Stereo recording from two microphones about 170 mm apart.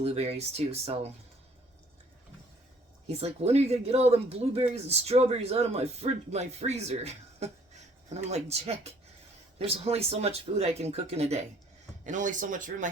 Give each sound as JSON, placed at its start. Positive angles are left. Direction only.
{"t": 0.0, "sound": "speech", "side_deg": -35}
{"t": 3.1, "sound": "speech", "side_deg": -35}